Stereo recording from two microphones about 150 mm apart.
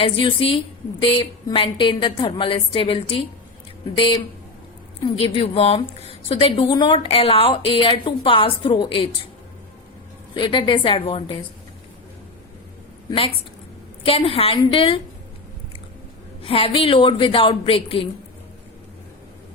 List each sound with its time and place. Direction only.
0.0 s a woman's voice: 35° left (ahead or behind)
10.3 s a woman's voice: 35° left (ahead or behind)
13.1 s a woman's voice: 40° left (ahead or behind)
16.4 s a woman's voice: 40° left (ahead or behind)